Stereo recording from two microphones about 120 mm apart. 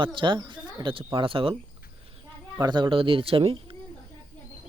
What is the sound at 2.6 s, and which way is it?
Speech, 40° right (ahead or behind).